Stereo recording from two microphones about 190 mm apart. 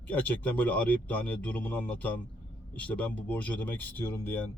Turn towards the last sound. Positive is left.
turn(degrees=10)  # may be behind; listen again after turning